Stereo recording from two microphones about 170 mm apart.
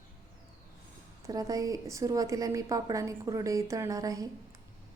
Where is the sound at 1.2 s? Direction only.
20° right (ahead or behind).